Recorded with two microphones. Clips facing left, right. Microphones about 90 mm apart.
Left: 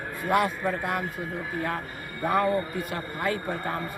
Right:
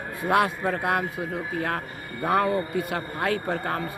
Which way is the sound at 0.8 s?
80° right.